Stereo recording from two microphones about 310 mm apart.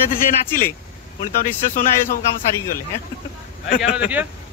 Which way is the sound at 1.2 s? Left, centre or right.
Left.